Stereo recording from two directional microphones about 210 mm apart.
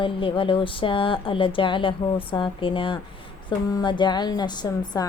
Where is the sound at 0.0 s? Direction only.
25° left (ahead or behind).